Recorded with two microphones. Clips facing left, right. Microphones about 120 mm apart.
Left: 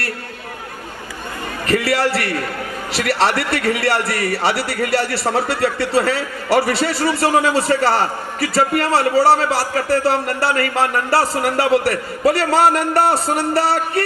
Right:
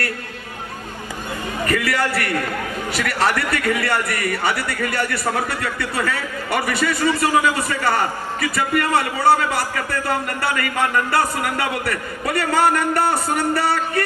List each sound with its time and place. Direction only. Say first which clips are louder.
1.6 s a man's voice: left 4 dB; 30° left (ahead or behind)
4.7 s a man's voice: left 4 dB; 75° left (ahead or behind)
5.8 s a man's voice: left 6 dB; 30° left (ahead or behind)
12.5 s a man's voice: left 1 dB; 75° left (ahead or behind)
12.7 s a man's voice: left 3 dB; 30° left (ahead or behind)